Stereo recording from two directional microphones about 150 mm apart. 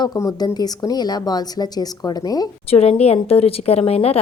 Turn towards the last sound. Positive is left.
turn(degrees=40)  # may be behind; listen again after turning